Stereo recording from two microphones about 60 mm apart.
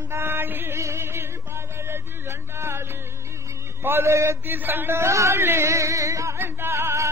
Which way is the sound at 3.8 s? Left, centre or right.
Right.